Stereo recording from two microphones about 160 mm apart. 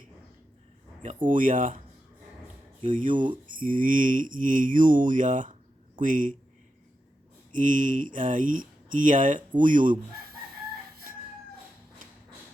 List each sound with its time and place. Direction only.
1.0 s speech: 55° right (ahead or behind)
2.9 s speech: 55° right (ahead or behind)
7.5 s speech: 55° right (ahead or behind)